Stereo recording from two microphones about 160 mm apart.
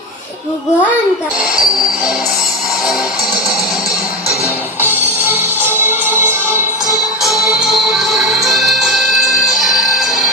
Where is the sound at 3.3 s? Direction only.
25° left (ahead or behind).